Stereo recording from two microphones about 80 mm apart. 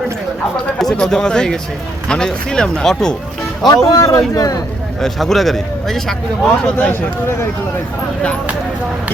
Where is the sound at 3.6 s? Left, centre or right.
Left.